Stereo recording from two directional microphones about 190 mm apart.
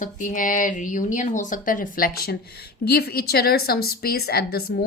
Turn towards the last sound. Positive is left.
turn(degrees=55)  # may be behind; listen again after turning